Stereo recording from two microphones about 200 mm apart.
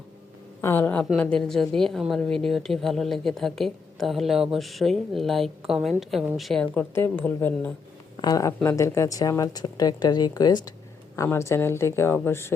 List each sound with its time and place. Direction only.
0.6 s a woman's voice: 10° left (ahead or behind)
8.1 s speech: 20° left (ahead or behind)